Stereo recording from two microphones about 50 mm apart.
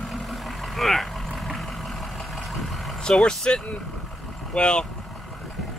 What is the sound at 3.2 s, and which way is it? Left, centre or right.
Speech, centre.